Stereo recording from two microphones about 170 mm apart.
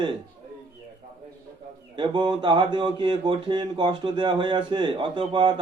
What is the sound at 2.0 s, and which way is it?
Speech, 25° right (ahead or behind).